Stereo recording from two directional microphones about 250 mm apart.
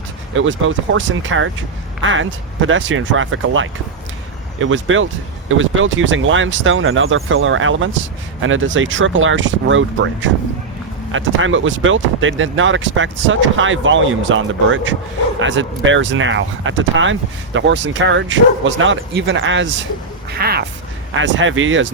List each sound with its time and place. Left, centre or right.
0.3 s speech: right